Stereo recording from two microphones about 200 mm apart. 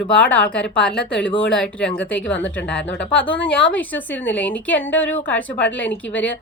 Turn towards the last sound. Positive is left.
turn(degrees=5)  # may be behind; listen again after turning